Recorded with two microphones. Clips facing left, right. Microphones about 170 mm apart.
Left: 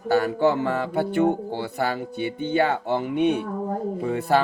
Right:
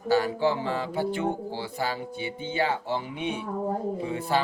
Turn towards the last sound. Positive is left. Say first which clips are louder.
# left 5 dB
turn(degrees=55)  # may be behind; listen again after turning